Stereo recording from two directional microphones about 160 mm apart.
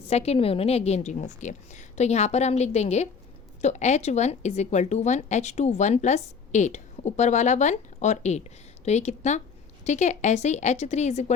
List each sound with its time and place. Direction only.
0.1 s a woman's voice: 40° left (ahead or behind)